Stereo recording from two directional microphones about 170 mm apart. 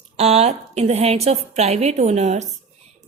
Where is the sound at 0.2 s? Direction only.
40° right (ahead or behind).